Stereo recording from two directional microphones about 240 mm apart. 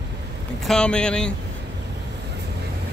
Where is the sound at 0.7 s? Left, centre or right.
Centre.